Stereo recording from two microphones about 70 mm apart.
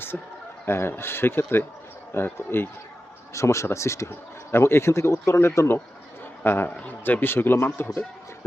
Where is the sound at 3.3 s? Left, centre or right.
Left.